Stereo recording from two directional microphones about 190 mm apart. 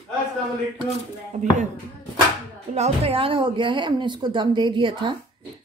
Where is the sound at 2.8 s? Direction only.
30° right (ahead or behind).